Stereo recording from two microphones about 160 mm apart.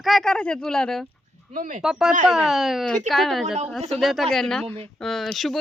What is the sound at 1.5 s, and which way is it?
Speech, 55° right (ahead or behind).